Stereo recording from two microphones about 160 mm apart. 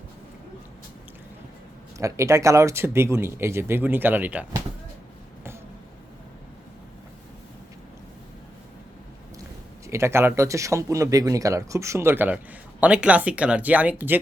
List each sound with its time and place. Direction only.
2.0 s speech: 20° right (ahead or behind)
9.8 s speech: 15° right (ahead or behind)